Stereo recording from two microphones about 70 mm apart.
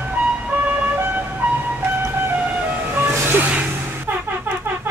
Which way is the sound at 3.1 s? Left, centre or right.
Right.